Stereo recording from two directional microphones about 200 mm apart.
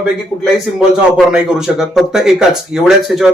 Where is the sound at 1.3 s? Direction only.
5° right (ahead or behind).